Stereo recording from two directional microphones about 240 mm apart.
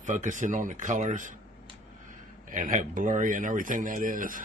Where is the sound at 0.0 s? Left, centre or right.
Right.